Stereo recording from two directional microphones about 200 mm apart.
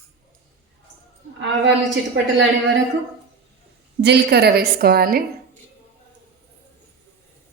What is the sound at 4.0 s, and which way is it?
A woman's voice, 55° right (ahead or behind).